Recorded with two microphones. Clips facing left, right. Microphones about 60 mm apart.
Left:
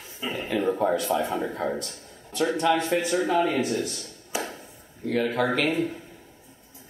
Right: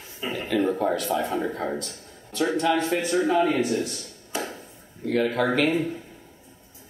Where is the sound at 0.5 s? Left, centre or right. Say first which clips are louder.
Right 3 dB; centre.